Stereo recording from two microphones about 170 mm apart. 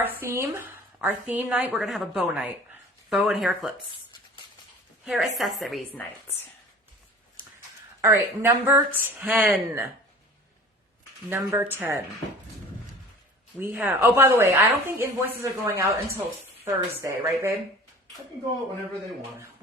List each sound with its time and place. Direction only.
0.0 s a woman's voice: 15° right (ahead or behind)
5.0 s speech: centre (ahead or behind)
5.9 s speech: 10° left (ahead or behind)
8.0 s a woman's voice: 15° right (ahead or behind)
11.3 s a woman's voice: 10° right (ahead or behind)
13.7 s a woman's voice: 10° right (ahead or behind)